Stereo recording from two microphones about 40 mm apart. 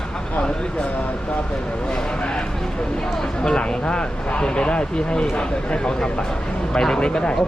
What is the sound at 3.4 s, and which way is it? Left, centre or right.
Speech, left.